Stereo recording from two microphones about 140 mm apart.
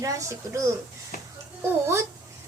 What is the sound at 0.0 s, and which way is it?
Speech, 20° right (ahead or behind).